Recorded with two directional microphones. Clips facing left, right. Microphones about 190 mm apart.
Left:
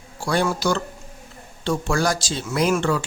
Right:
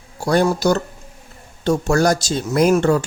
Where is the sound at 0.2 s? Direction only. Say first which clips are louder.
Right 5 dB; 40° right (ahead or behind).